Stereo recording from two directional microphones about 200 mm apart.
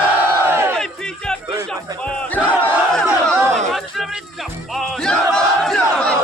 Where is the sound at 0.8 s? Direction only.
5° left (ahead or behind).